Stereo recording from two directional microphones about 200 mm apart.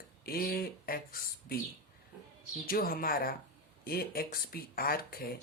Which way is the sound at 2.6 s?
45° left (ahead or behind).